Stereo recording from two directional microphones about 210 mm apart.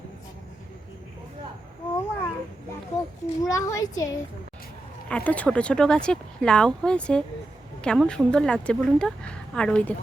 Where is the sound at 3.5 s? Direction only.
15° left (ahead or behind).